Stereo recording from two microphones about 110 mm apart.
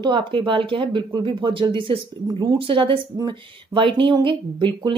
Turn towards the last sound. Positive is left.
turn(degrees=-45)  # may be behind; listen again after turning